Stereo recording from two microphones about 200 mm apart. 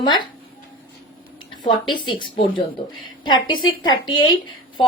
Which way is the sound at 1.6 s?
25° left (ahead or behind).